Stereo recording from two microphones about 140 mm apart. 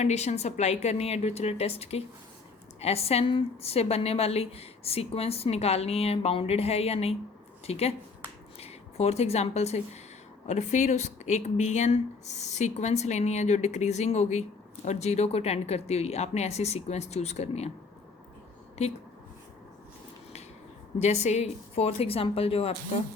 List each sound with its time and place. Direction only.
0.0 s a woman's voice: 50° left (ahead or behind)
21.0 s a woman's voice: 55° left (ahead or behind)